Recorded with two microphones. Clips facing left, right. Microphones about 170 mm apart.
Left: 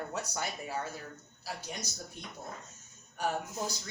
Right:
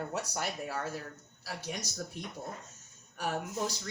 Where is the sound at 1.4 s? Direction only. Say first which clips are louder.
Right 1 dB; 80° right.